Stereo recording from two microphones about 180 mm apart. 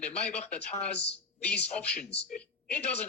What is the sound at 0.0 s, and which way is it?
Speech, 40° left (ahead or behind).